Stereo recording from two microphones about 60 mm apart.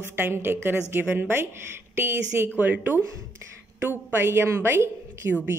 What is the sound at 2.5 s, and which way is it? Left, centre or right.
Speech, right.